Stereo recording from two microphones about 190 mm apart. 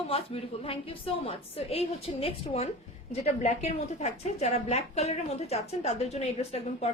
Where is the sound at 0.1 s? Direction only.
30° left (ahead or behind).